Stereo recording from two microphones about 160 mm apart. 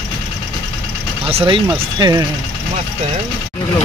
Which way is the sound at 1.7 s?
25° right (ahead or behind).